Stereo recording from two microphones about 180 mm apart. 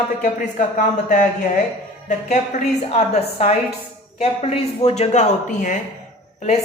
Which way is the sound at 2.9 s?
35° left (ahead or behind).